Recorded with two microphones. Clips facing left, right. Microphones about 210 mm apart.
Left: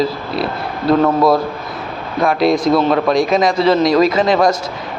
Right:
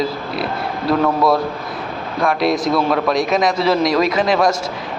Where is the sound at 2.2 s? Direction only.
Centre (ahead or behind).